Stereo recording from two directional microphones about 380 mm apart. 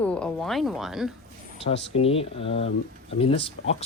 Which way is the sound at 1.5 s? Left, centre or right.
Centre.